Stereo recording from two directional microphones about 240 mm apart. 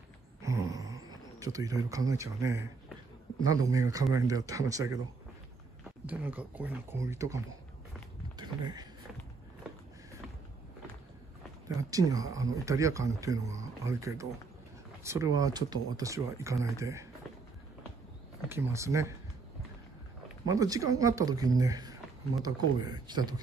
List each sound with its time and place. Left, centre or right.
0.4 s a sound: centre
3.4 s speech: centre
6.0 s speech: centre
11.7 s speech: centre
18.5 s speech: centre
20.4 s speech: centre